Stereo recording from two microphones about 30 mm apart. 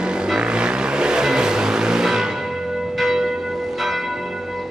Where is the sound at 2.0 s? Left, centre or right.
Centre.